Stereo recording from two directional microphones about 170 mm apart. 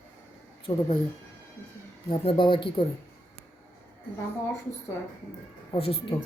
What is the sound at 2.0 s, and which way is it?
Speech, 30° left (ahead or behind).